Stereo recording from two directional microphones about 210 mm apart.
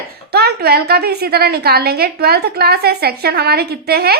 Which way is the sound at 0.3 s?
50° right (ahead or behind).